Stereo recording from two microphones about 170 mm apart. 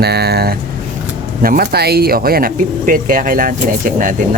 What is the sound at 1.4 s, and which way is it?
Speech, 60° right (ahead or behind).